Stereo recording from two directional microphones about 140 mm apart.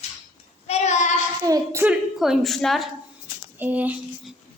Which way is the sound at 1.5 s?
25° right (ahead or behind).